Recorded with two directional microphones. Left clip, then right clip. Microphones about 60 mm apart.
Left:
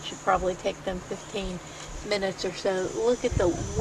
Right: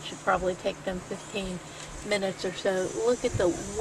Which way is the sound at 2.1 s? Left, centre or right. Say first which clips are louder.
Left 1 dB; right.